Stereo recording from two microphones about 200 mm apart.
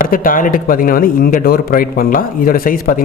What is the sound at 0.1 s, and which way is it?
Speech, 45° left (ahead or behind).